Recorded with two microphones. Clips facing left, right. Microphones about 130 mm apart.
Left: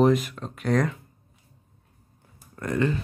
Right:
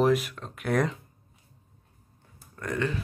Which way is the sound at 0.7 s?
10° right (ahead or behind).